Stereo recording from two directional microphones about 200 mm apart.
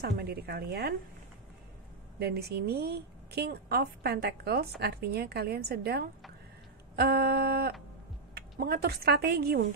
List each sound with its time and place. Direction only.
0.0 s a woman's voice: 50° right (ahead or behind)
2.1 s a woman's voice: 55° right (ahead or behind)